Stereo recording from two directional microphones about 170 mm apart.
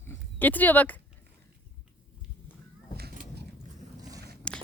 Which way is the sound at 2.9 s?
70° right (ahead or behind).